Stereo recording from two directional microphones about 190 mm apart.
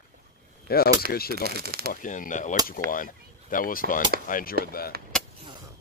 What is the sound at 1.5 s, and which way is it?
Speech, 55° right (ahead or behind).